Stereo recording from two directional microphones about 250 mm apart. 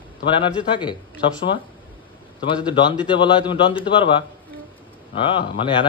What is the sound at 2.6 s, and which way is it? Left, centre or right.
Speech, centre.